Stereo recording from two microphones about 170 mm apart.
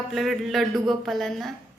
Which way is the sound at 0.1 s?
Centre (ahead or behind).